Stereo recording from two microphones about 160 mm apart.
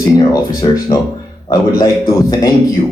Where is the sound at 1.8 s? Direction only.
20° left (ahead or behind).